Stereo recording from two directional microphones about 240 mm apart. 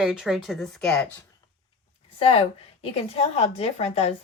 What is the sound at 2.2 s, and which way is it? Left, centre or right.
A woman's voice, left.